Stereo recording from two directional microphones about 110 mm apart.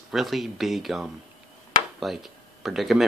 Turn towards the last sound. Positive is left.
turn(degrees=0)  # may be behind; listen again after turning